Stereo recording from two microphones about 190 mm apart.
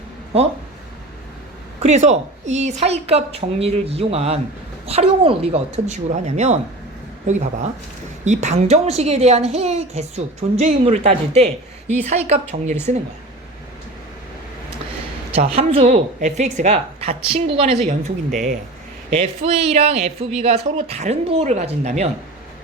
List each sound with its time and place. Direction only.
1.8 s speech: 35° right (ahead or behind)
15.4 s speech: 35° right (ahead or behind)